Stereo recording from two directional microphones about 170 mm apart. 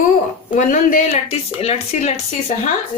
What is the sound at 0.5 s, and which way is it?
Speech, 50° left (ahead or behind).